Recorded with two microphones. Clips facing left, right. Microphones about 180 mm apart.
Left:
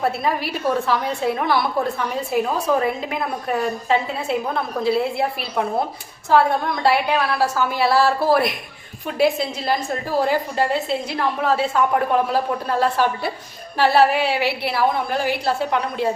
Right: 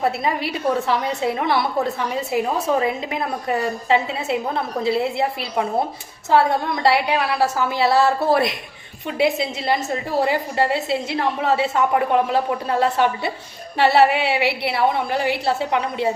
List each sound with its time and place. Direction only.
0.0 s a woman's voice: 20° right (ahead or behind)
6.8 s a woman's voice: 20° right (ahead or behind)